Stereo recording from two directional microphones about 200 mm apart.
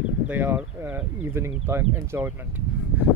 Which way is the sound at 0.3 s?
10° right (ahead or behind).